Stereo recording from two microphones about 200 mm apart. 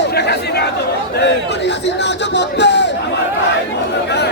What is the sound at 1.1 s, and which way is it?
A man's voice, 60° left (ahead or behind).